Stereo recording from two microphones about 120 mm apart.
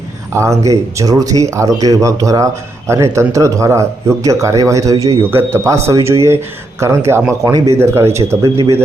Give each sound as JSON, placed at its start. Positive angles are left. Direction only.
{"t": 0.3, "sound": "speech", "side_deg": -25}